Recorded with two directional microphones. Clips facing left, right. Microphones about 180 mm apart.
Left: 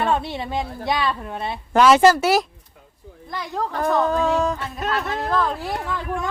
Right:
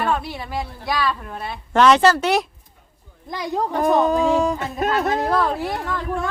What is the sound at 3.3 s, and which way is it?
A child's voice, 15° right (ahead or behind).